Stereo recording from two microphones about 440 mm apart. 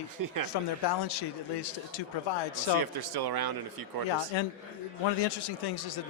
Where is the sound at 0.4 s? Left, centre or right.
Left.